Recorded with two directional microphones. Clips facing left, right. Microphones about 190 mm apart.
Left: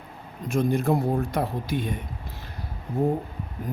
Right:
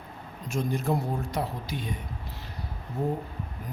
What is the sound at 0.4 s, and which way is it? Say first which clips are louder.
Speech: left 6 dB; 55° left (ahead or behind).